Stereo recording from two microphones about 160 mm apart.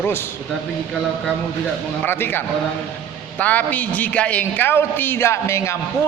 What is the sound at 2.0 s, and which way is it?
A man's voice, 15° left (ahead or behind).